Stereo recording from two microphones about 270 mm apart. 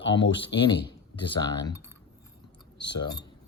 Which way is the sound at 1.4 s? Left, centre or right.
Centre.